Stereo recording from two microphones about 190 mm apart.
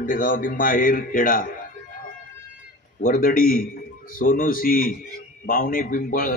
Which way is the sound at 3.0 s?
45° left (ahead or behind).